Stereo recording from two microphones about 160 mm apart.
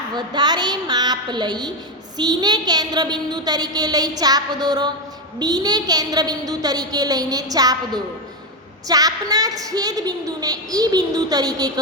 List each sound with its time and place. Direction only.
0.1 s a woman's voice: 25° right (ahead or behind)